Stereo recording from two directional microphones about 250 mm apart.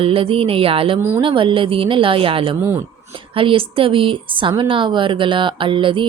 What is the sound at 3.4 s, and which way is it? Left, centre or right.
A woman's voice, right.